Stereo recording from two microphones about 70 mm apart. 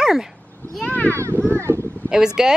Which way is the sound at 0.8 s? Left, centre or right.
Left.